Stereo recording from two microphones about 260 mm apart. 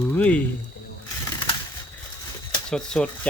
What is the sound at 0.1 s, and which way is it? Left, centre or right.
Speech, centre.